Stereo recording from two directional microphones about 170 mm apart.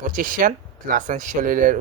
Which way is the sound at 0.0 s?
55° right (ahead or behind).